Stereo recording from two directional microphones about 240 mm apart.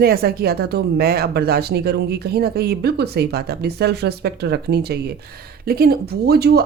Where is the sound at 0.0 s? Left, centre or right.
Right.